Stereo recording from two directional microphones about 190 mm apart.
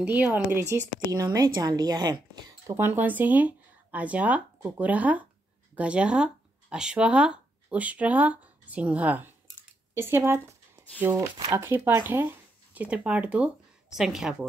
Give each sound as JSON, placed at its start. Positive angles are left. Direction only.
{"t": 0.0, "sound": "speech", "side_deg": -10}